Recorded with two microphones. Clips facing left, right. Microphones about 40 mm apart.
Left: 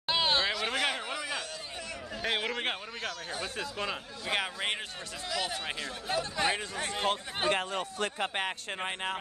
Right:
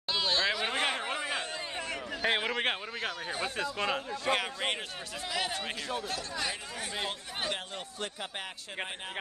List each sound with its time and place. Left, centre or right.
0.1 s a sound: left
0.7 s a sound: centre
2.2 s a man's voice: centre
4.3 s a man's voice: centre
5.3 s speech: centre
6.3 s speech: left
7.4 s speech: centre
8.0 s speech: left